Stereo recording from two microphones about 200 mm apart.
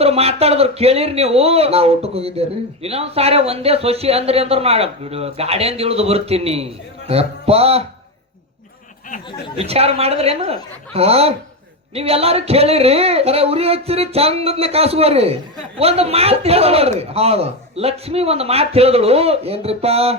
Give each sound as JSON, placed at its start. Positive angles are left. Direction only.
{"t": 0.0, "sound": "speech", "side_deg": -30}
{"t": 9.6, "sound": "speech", "side_deg": -30}